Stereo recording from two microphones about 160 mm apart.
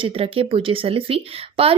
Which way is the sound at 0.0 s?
35° right (ahead or behind).